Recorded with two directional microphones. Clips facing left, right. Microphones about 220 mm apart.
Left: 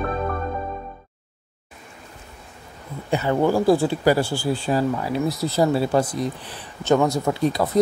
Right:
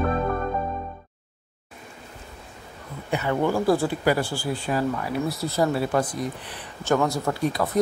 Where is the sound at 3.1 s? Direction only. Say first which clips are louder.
Left 4 dB; 30° left (ahead or behind).